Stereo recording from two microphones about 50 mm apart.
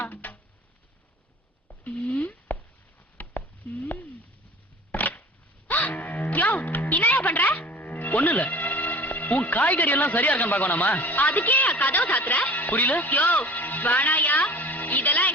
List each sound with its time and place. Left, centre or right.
0.0 s a sound: left
2.1 s busy signal: left
3.2 s a sound: left
5.6 s music: left
9.4 s a man's voice: left
14.5 s music: left